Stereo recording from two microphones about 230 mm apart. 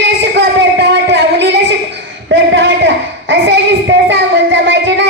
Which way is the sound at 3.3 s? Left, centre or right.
Right.